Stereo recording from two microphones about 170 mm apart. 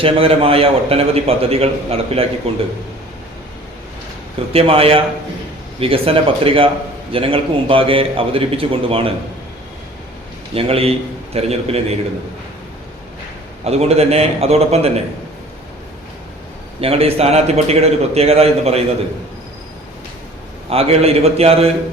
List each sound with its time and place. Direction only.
0.0 s a man's voice: 35° right (ahead or behind)
4.5 s a man's voice: 35° right (ahead or behind)
10.5 s a man's voice: 35° right (ahead or behind)
13.7 s a man's voice: 40° right (ahead or behind)
16.8 s a man's voice: 35° right (ahead or behind)
20.7 s a man's voice: 35° right (ahead or behind)